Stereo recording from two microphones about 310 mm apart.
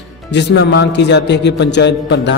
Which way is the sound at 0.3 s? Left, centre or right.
Left.